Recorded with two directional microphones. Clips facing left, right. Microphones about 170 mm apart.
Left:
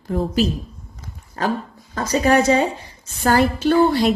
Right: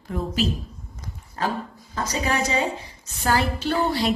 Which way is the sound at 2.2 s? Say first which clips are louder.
Left 9 dB; 55° left (ahead or behind).